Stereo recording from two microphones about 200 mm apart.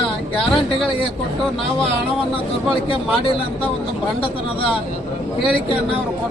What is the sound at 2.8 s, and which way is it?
Speech, 25° left (ahead or behind).